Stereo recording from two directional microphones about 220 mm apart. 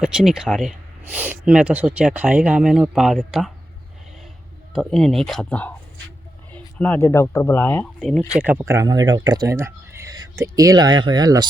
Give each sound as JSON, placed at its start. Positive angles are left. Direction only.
{"t": 0.0, "sound": "speech", "side_deg": -5}
{"t": 4.7, "sound": "speech", "side_deg": 0}
{"t": 8.4, "sound": "speech", "side_deg": -10}